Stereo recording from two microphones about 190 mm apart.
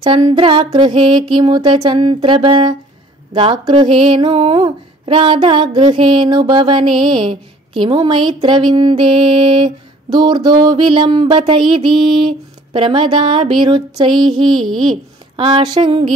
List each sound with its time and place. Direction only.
0.0 s female singing: 25° right (ahead or behind)
15.3 s female singing: 25° right (ahead or behind)